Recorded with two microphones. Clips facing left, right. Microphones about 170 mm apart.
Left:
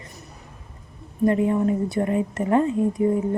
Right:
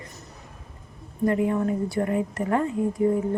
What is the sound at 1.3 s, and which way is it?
A woman's voice, 25° left (ahead or behind).